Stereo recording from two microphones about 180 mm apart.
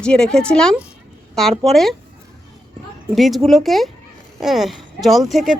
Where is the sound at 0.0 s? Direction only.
5° left (ahead or behind).